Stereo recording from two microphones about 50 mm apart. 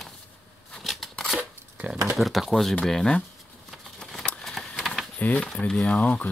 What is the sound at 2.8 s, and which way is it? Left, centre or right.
Speech, centre.